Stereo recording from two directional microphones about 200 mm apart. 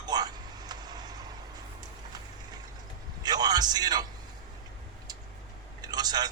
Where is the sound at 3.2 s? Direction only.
20° right (ahead or behind).